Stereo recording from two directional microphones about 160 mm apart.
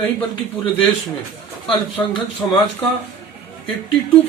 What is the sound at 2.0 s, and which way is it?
Speech, 20° left (ahead or behind).